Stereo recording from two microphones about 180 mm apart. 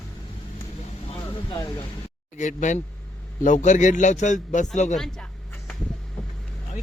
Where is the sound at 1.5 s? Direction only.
20° left (ahead or behind).